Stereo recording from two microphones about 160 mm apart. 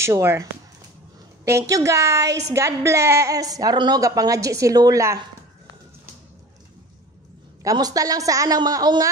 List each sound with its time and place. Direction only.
0.0 s a woman's voice: 15° right (ahead or behind)
7.6 s a woman's voice: 25° right (ahead or behind)